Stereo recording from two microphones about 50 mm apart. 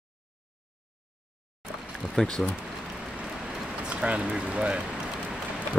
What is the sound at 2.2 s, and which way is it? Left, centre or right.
Speech, centre.